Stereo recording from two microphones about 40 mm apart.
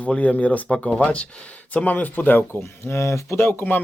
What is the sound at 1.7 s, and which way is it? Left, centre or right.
Speech, left.